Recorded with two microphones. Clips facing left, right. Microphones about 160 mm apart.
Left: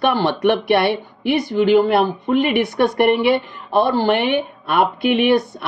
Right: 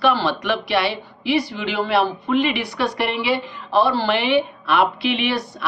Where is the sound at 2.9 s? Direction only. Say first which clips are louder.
Left 9 dB; 55° left (ahead or behind).